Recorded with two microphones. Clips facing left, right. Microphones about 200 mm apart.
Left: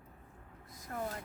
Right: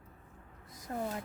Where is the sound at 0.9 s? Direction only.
25° right (ahead or behind).